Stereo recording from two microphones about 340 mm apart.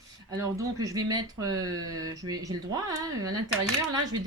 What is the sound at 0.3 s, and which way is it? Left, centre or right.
Speech, centre.